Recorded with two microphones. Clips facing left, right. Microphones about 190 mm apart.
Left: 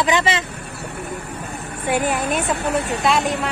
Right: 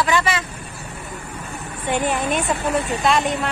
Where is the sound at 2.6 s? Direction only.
65° left (ahead or behind).